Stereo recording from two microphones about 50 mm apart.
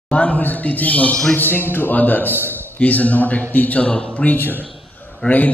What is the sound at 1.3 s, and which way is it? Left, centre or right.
A man's voice, left.